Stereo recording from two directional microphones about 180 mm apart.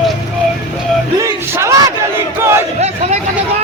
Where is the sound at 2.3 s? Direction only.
15° right (ahead or behind).